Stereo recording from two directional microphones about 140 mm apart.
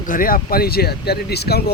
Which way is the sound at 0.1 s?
80° left.